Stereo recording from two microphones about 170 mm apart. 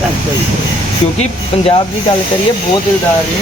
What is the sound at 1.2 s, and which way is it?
Speech, 35° left (ahead or behind).